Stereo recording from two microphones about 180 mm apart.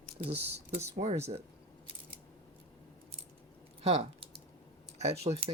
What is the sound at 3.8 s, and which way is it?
Speech, 35° right (ahead or behind).